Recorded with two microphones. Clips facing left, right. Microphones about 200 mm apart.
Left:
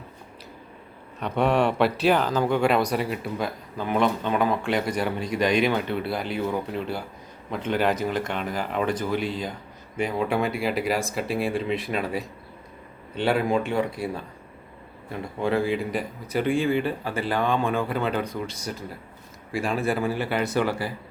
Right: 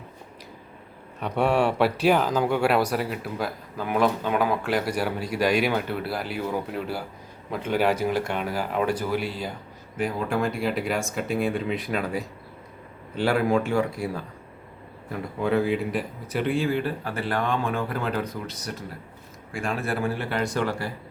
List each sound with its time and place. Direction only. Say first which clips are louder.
1.2 s speech: even; 10° right (ahead or behind)
10.2 s speech: left 2 dB; 5° left (ahead or behind)
13.1 s a man's voice: right 1 dB; 20° left (ahead or behind)
15.4 s speech: right 1 dB; centre (ahead or behind)